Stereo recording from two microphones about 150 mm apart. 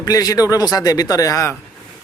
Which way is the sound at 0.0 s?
25° left (ahead or behind).